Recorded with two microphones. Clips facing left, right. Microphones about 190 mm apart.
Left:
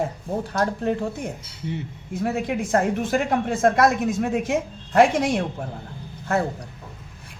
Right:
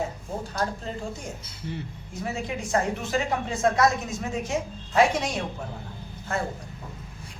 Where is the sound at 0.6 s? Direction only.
65° left (ahead or behind).